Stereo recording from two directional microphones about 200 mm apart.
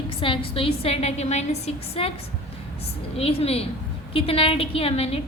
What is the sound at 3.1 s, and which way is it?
A woman's voice, 30° left (ahead or behind).